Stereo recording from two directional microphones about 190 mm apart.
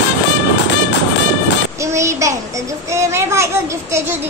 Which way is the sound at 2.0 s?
15° right (ahead or behind).